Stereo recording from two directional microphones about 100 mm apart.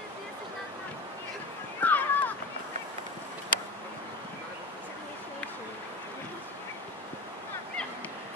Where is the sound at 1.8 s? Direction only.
15° left (ahead or behind).